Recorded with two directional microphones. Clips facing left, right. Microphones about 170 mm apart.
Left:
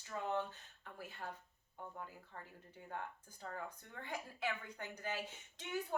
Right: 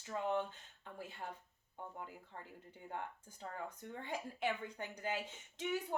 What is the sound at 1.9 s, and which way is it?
Speech, 20° right (ahead or behind).